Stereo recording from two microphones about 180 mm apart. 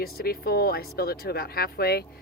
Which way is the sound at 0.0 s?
55° left (ahead or behind).